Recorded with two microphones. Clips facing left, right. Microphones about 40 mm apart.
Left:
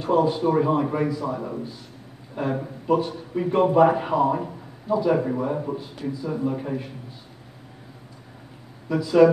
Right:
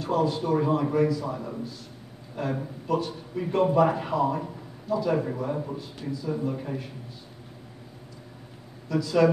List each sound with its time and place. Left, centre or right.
0.0 s a man's voice: left
8.8 s a man's voice: centre